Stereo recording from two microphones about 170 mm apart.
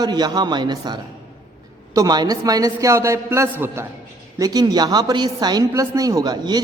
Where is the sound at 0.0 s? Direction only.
25° right (ahead or behind).